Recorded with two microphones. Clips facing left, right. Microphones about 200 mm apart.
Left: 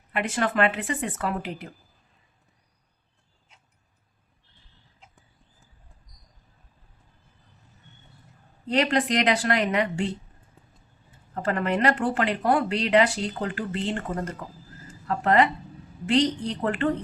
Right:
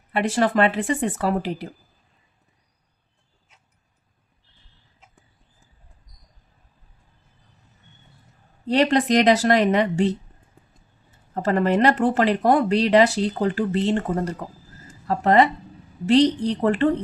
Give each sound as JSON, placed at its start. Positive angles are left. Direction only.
{"t": 0.1, "sound": "speech", "side_deg": -35}
{"t": 8.6, "sound": "speech", "side_deg": -35}
{"t": 11.3, "sound": "speech", "side_deg": -35}